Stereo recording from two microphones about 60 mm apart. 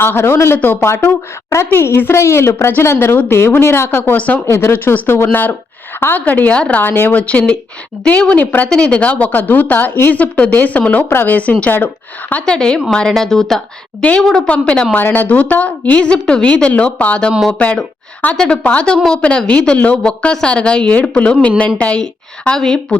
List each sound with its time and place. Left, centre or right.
0.0 s speech: left
4.2 s a woman's voice: left
4.4 s speech: left
5.0 s a woman's voice: left
11.1 s a woman's voice: left
12.5 s a woman's voice: centre
14.9 s a woman's voice: left
18.3 s a woman's voice: centre
18.6 s a woman's voice: left